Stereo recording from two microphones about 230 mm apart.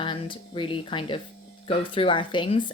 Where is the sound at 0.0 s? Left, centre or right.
Left.